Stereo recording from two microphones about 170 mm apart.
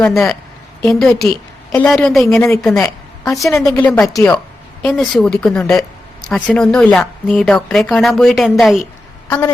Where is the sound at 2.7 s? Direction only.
20° left (ahead or behind).